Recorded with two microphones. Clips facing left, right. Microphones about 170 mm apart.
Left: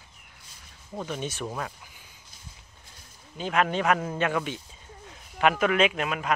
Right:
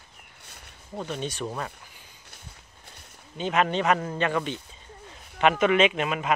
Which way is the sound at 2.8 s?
65° right (ahead or behind).